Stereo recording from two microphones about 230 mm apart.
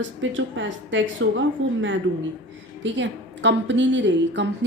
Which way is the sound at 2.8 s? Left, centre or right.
Right.